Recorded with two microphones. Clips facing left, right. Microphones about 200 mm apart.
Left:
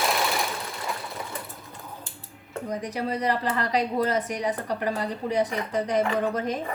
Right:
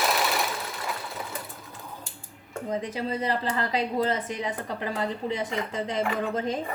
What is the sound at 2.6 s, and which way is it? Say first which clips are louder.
A woman's voice: even; 25° right (ahead or behind).